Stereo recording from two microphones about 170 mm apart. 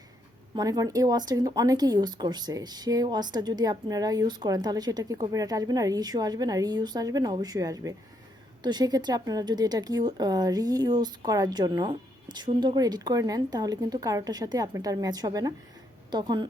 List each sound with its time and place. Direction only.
0.5 s speech: 20° right (ahead or behind)